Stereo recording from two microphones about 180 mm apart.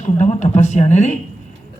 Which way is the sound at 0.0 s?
40° left (ahead or behind).